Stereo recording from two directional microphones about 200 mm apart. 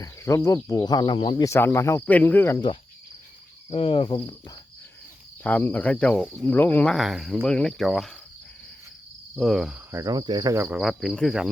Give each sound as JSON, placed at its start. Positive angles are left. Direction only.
{"t": 0.0, "sound": "speech", "side_deg": 15}
{"t": 3.7, "sound": "speech", "side_deg": 30}
{"t": 5.4, "sound": "speech", "side_deg": 10}
{"t": 9.3, "sound": "cricket", "side_deg": 0}
{"t": 10.8, "sound": "speech", "side_deg": 0}